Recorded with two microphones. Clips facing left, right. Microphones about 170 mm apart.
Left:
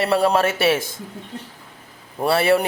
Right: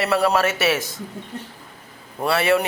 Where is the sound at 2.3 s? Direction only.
30° left (ahead or behind).